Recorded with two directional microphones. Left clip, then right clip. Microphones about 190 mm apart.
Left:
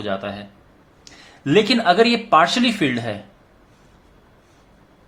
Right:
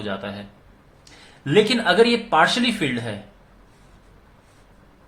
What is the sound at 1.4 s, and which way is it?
Speech, 30° left (ahead or behind).